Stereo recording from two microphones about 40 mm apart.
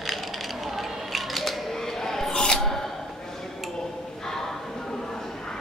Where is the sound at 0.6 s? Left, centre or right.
Centre.